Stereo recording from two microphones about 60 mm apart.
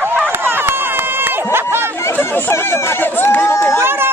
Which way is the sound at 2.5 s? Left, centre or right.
Left.